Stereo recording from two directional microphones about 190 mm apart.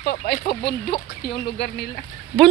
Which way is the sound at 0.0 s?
55° left (ahead or behind).